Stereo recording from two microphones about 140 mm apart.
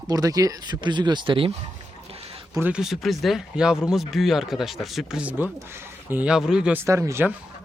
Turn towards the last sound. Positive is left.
turn(degrees=-20)  # may be behind; listen again after turning